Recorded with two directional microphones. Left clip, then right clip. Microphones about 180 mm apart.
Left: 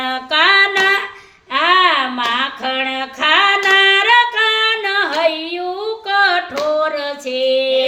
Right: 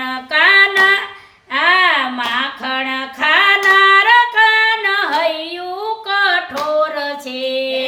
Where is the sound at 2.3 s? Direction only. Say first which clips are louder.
Even; 20° left (ahead or behind).